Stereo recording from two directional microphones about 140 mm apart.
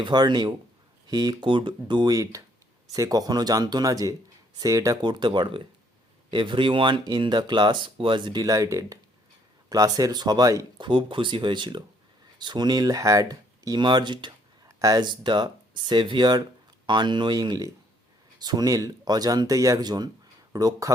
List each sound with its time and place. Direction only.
0.0 s speech: 30° right (ahead or behind)